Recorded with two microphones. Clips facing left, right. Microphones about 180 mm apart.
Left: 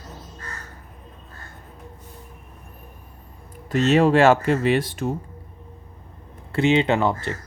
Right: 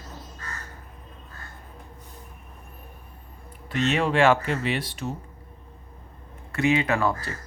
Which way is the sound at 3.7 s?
40° left (ahead or behind).